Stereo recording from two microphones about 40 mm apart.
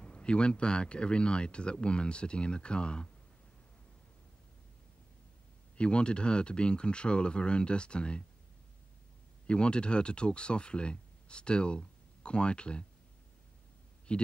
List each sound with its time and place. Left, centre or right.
0.0 s speech: left
5.8 s speech: left
9.5 s speech: left
14.1 s speech: left